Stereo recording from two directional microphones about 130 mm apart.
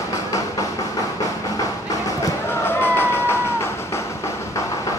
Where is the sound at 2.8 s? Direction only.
15° left (ahead or behind).